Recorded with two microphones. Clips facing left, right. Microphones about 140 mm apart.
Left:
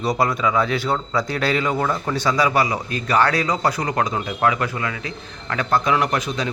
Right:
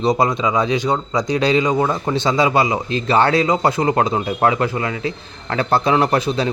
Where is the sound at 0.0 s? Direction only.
20° right (ahead or behind).